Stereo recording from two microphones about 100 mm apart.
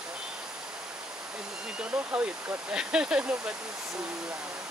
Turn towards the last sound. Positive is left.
turn(degrees=-10)  # may be behind; listen again after turning